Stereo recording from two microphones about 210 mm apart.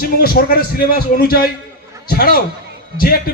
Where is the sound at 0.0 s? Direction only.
45° left (ahead or behind).